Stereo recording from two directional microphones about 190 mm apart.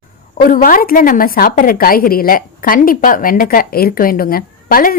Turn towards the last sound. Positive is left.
turn(degrees=50)  # may be behind; listen again after turning